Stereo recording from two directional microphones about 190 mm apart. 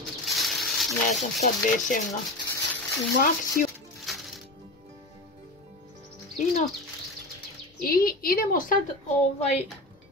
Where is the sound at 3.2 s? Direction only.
50° left (ahead or behind).